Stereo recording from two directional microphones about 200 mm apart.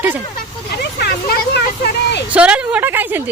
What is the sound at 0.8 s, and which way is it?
Vehicle, 55° left (ahead or behind).